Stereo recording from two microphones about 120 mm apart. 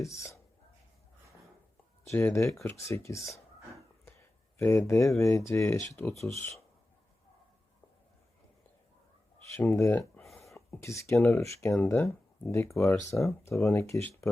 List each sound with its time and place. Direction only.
0.0 s speech: 25° left (ahead or behind)
2.1 s speech: 20° left (ahead or behind)
4.5 s speech: 20° left (ahead or behind)
9.6 s speech: 20° left (ahead or behind)
10.0 s a sound: centre (ahead or behind)
10.5 s speech: 25° left (ahead or behind)